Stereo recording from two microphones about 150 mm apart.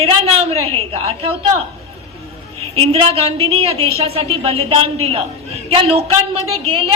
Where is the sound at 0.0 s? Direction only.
40° right (ahead or behind).